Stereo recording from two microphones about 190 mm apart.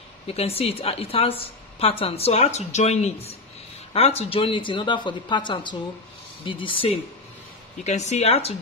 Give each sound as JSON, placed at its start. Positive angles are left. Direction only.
{"t": 0.3, "sound": "a woman's voice", "side_deg": 30}
{"t": 7.8, "sound": "a woman's voice", "side_deg": 40}